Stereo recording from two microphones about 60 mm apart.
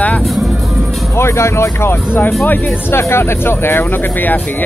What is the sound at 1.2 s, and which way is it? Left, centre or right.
Speech, left.